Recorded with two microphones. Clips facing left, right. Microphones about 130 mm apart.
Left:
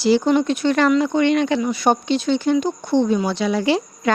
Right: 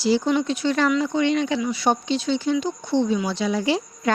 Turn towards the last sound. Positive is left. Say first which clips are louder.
# left 3 dB
turn(degrees=70)  # may be behind; listen again after turning